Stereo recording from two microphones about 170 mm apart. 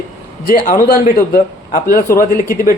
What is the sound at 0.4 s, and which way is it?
A man's voice, 55° left (ahead or behind).